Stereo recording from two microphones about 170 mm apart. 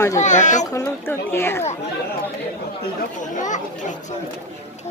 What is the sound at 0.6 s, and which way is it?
Speech, 20° left (ahead or behind).